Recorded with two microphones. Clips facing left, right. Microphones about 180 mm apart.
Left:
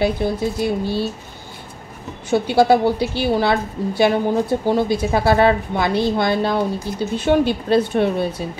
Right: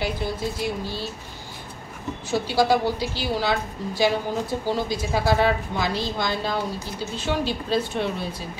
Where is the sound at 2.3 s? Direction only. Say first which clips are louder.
Left 6 dB; 60° left (ahead or behind).